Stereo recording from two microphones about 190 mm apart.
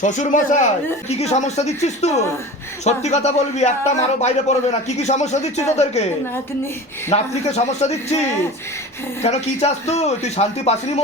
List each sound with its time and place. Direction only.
0.0 s a man's voice: 40° left (ahead or behind)
7.1 s a man's voice: 35° left (ahead or behind)